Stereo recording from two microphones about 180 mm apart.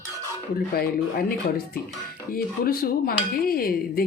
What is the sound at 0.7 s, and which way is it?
Speech, 55° left (ahead or behind).